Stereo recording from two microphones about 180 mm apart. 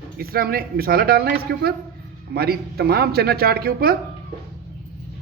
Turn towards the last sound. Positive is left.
turn(degrees=-55)  # may be behind; listen again after turning